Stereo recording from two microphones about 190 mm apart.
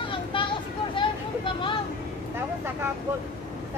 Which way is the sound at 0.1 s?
25° left (ahead or behind).